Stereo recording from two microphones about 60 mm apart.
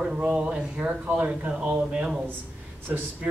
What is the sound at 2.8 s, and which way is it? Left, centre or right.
Speech, right.